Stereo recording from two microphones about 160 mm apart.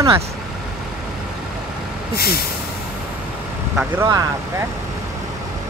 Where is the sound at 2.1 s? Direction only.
75° left (ahead or behind).